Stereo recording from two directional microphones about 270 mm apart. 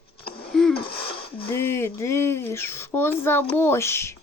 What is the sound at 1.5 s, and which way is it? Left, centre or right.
Speech, centre.